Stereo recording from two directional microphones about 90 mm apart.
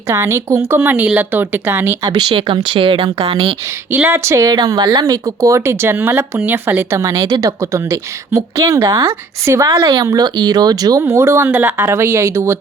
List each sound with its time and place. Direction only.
0.1 s a woman's voice: 30° right (ahead or behind)
2.1 s speech: 75° right (ahead or behind)
3.9 s a woman's voice: 25° right (ahead or behind)
4.4 s speech: 50° right (ahead or behind)
4.9 s speech: 40° right (ahead or behind)
9.7 s speech: 50° right (ahead or behind)
11.0 s a woman's voice: 30° right (ahead or behind)